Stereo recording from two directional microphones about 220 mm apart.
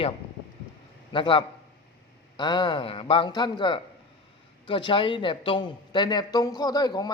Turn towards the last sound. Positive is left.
turn(degrees=20)  # may be behind; listen again after turning